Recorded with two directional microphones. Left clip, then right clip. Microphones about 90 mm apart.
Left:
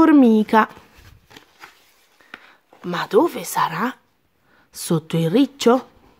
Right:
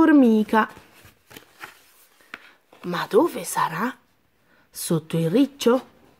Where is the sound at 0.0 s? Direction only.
25° left (ahead or behind).